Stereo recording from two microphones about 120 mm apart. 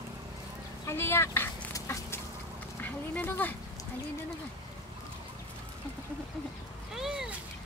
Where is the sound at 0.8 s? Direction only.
20° left (ahead or behind).